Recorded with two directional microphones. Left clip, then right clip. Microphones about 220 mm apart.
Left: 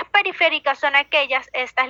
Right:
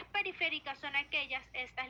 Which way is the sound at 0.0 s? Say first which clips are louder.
Left 18 dB; 45° left (ahead or behind).